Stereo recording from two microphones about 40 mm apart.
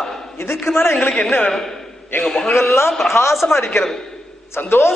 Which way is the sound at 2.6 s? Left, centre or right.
Left.